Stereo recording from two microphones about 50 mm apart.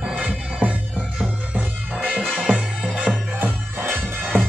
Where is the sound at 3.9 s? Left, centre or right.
Right.